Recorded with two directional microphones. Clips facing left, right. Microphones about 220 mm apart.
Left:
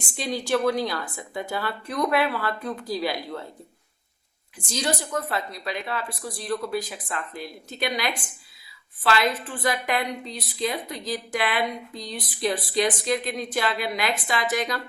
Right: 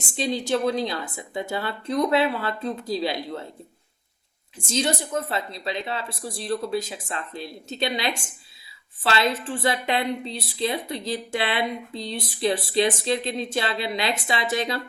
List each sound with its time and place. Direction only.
0.2 s a woman's voice: 20° right (ahead or behind)
4.6 s a woman's voice: 25° right (ahead or behind)